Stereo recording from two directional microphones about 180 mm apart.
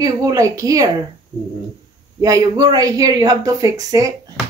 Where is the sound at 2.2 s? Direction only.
20° right (ahead or behind).